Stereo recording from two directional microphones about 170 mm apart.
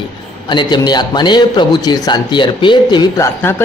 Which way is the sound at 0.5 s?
25° left (ahead or behind).